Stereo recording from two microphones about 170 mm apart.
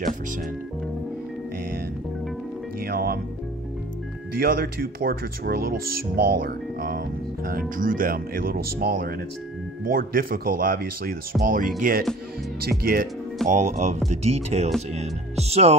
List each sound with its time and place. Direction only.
2.8 s speech: 60° right (ahead or behind)
4.3 s speech: 65° right (ahead or behind)
13.5 s speech: 40° right (ahead or behind)